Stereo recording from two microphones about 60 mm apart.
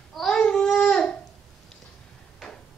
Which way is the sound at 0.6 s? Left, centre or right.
Centre.